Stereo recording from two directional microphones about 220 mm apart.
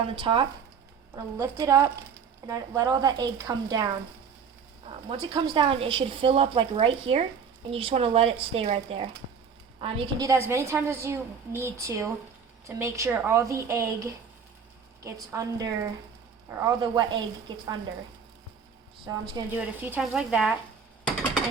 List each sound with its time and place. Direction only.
0.0 s a woman's voice: 20° right (ahead or behind)
19.1 s a woman's voice: 15° right (ahead or behind)